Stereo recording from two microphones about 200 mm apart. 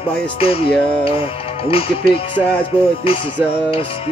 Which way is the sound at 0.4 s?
30° left (ahead or behind).